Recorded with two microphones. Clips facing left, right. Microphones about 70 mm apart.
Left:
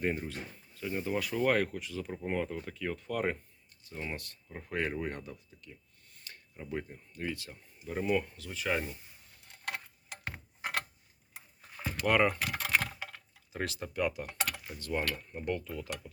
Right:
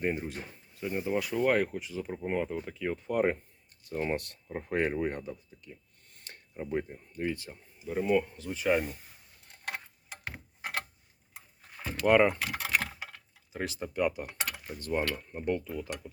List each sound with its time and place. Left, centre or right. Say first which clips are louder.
0.0 s speech: right 2 dB; centre
3.8 s speech: right 8 dB; right
4.4 s speech: right 4 dB; right
6.1 s a sound: right 1 dB; right
6.6 s speech: right 5 dB; right
7.9 s speech: right 4 dB; centre
12.0 s speech: right 4 dB; centre
12.5 s typing: even; centre
13.7 s speech: right 4 dB; centre
14.7 s speech: right 4 dB; right
15.0 s speech: right 3 dB; centre